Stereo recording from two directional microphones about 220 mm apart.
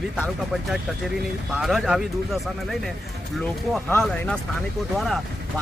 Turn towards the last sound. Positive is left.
turn(degrees=0)  # may be behind; listen again after turning